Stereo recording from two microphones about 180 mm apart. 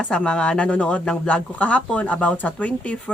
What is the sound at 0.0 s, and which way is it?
Speech, 5° left (ahead or behind).